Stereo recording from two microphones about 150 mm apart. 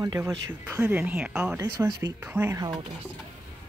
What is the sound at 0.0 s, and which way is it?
Speech, 20° right (ahead or behind).